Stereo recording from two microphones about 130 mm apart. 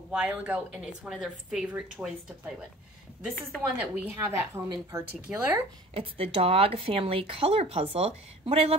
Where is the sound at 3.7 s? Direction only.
15° right (ahead or behind).